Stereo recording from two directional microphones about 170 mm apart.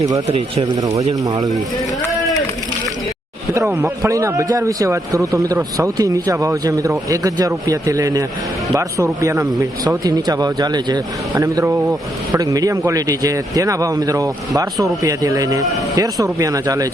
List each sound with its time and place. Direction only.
0.3 s speech: 35° right (ahead or behind)
0.7 s a man's voice: 20° right (ahead or behind)
3.7 s a man's voice: 15° right (ahead or behind)